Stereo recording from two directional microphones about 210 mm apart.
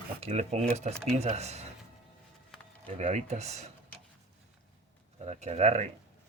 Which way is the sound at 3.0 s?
35° right (ahead or behind).